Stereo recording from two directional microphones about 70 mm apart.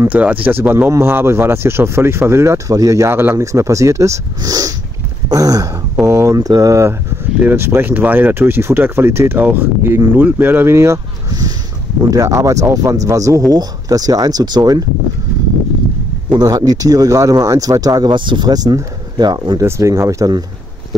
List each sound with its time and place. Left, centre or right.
0.1 s speech: right
2.7 s speech: right
3.1 s speech: right
3.3 s speech: right
4.4 s speech: right
6.0 s speech: right
6.3 s speech: right
7.3 s speech: right
12.1 s speech: right
16.4 s speech: right
19.8 s speech: right